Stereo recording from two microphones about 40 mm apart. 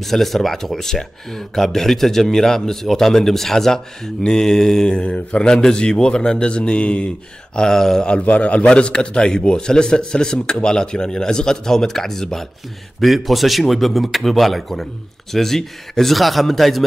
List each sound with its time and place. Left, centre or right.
0.0 s speech: centre
4.8 s a man's voice: left
7.5 s speech: centre
8.1 s a man's voice: left; by 12.4 s centre
13.0 s a man's voice: centre